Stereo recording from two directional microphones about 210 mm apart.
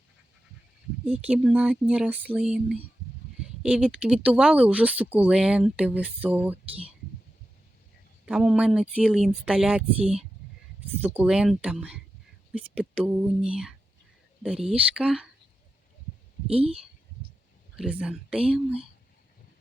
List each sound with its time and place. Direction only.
1.0 s speech: 5° right (ahead or behind)
8.2 s speech: 5° right (ahead or behind)
14.9 s speech: 5° right (ahead or behind)
16.5 s speech: 25° right (ahead or behind)
17.7 s speech: 5° right (ahead or behind)